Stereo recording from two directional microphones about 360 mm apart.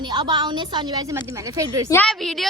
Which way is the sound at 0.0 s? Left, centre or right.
Centre.